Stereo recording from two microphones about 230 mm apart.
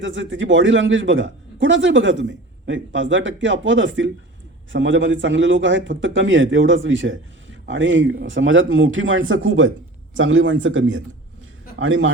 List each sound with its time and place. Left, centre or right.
0.0 s a man's voice: right